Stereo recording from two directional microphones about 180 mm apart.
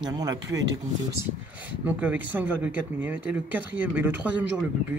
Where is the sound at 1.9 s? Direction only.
10° right (ahead or behind).